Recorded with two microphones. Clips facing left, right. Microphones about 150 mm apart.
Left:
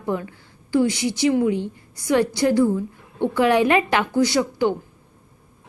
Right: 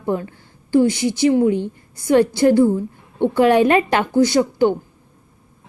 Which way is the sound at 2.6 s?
30° right (ahead or behind).